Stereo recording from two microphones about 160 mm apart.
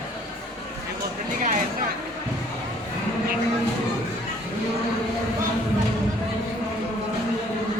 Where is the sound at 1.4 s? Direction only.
50° right (ahead or behind).